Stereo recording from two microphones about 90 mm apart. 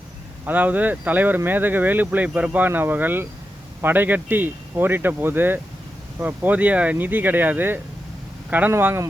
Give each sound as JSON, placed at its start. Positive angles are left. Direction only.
{"t": 0.4, "sound": "speech", "side_deg": -20}